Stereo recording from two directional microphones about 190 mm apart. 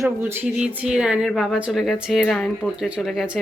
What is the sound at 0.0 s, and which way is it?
Speech, 10° right (ahead or behind).